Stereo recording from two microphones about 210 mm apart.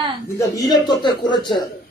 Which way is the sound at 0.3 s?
15° left (ahead or behind).